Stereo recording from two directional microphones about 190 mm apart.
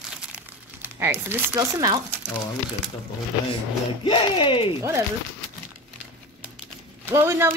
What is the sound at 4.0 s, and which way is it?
Speech, 25° left (ahead or behind).